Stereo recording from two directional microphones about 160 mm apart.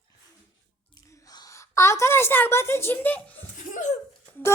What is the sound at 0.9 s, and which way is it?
A woman's voice, 20° left (ahead or behind).